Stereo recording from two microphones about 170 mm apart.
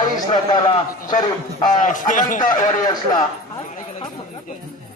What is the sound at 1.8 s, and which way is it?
Speech, 50° left (ahead or behind).